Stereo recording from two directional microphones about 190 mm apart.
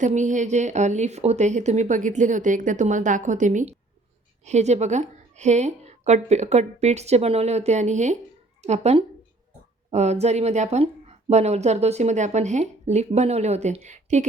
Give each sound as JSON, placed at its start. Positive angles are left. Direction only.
{"t": 0.0, "sound": "a woman's voice", "side_deg": -40}